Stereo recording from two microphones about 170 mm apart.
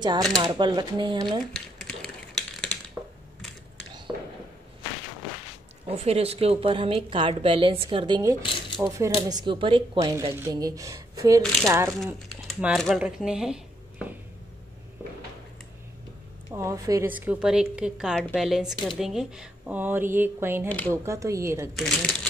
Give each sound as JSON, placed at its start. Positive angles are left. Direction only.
{"t": 0.0, "sound": "speech", "side_deg": -25}
{"t": 1.5, "sound": "a sound", "side_deg": 5}
{"t": 4.1, "sound": "a sound", "side_deg": -20}
{"t": 5.9, "sound": "a woman's voice", "side_deg": -35}
{"t": 8.4, "sound": "speech", "side_deg": 30}
{"t": 8.8, "sound": "speech", "side_deg": -20}
{"t": 9.9, "sound": "speech", "side_deg": -20}
{"t": 12.4, "sound": "speech", "side_deg": -5}
{"t": 13.0, "sound": "a sound", "side_deg": -5}
{"t": 16.5, "sound": "a woman's voice", "side_deg": -20}
{"t": 20.6, "sound": "speech", "side_deg": 10}
{"t": 20.9, "sound": "a woman's voice", "side_deg": -15}
{"t": 21.7, "sound": "speech", "side_deg": 0}